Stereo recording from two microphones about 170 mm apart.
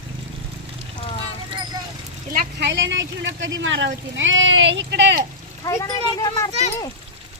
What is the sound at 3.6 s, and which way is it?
Speech, 90° right.